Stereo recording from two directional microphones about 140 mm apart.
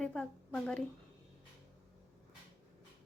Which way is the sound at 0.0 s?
5° left (ahead or behind).